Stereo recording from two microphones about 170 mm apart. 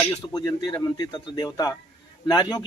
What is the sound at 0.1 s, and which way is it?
Speech, 20° left (ahead or behind).